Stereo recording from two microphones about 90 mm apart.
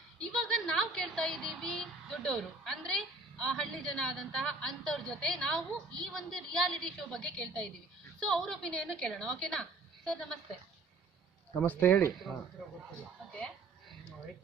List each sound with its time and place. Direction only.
0.2 s a woman's voice: 5° left (ahead or behind)
11.6 s speech: 20° left (ahead or behind)